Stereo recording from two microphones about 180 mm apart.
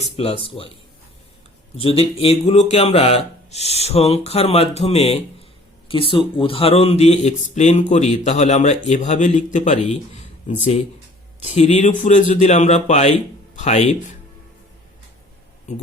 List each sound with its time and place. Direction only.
0.0 s speech: 35° left (ahead or behind)
1.7 s speech: 30° left (ahead or behind)